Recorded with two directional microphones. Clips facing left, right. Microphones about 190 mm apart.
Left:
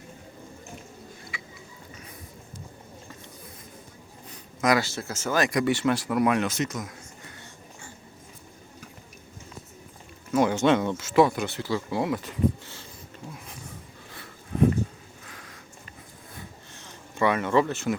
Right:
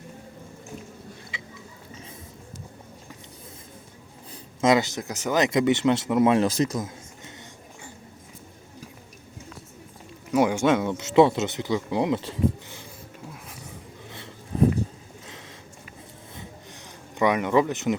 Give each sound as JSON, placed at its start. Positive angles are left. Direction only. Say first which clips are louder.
{"t": 1.3, "sound": "a sound", "louder": "right 1 dB", "side_deg": -20}
{"t": 4.3, "sound": "speech", "louder": "right 3 dB", "side_deg": -25}
{"t": 10.3, "sound": "speech", "louder": "right 1 dB", "side_deg": -10}
{"t": 10.9, "sound": "speech", "louder": "right 3 dB", "side_deg": -20}
{"t": 17.2, "sound": "speech", "louder": "right 2 dB", "side_deg": -15}